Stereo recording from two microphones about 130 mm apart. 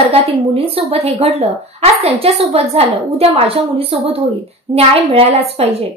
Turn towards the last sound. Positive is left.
turn(degrees=-50)  # may be behind; listen again after turning